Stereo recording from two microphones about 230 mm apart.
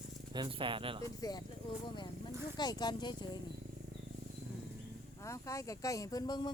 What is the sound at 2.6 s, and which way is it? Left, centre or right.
Speech, centre.